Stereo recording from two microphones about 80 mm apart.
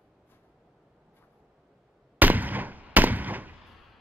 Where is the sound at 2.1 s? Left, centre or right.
Right.